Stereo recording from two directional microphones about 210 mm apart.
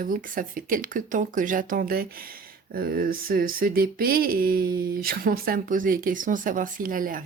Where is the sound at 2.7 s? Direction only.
45° right (ahead or behind).